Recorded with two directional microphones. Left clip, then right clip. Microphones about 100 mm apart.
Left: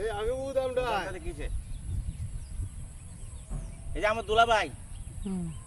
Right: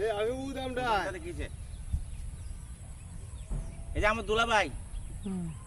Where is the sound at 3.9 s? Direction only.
30° right (ahead or behind).